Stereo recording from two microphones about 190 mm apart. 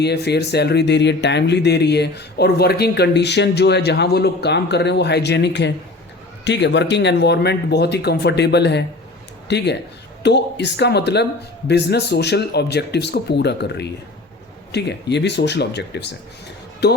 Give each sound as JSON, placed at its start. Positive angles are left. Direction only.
{"t": 0.0, "sound": "speech", "side_deg": 60}